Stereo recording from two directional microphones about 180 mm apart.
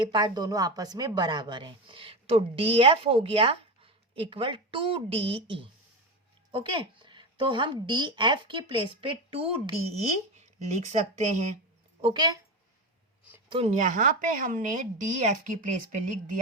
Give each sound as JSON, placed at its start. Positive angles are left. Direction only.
{"t": 0.0, "sound": "speech", "side_deg": -25}
{"t": 12.0, "sound": "speech", "side_deg": -20}
{"t": 13.5, "sound": "speech", "side_deg": -35}